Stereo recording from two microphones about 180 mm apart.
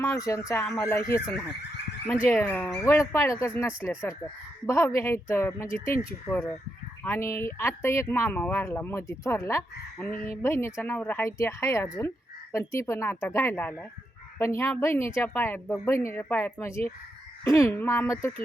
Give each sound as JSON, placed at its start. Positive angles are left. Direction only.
{"t": 0.0, "sound": "a woman's voice", "side_deg": 15}
{"t": 7.0, "sound": "a woman's voice", "side_deg": 15}